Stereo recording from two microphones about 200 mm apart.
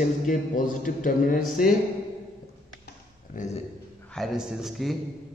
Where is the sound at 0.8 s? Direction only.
40° left (ahead or behind).